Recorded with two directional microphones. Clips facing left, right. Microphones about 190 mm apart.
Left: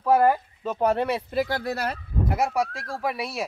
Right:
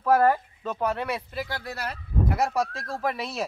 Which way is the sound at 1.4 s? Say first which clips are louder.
Left 7 dB; 55° left (ahead or behind).